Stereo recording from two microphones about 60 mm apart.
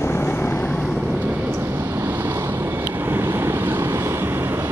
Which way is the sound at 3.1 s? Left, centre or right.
Right.